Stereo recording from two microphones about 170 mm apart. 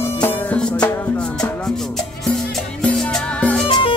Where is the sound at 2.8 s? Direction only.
5° left (ahead or behind).